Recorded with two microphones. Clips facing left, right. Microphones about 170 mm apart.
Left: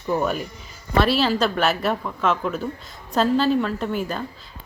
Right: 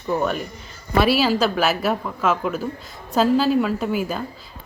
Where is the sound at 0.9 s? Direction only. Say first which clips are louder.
Right 2 dB; 5° right (ahead or behind).